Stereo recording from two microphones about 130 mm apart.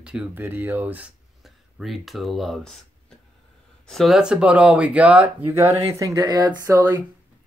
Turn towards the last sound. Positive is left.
turn(degrees=-20)  # may be behind; listen again after turning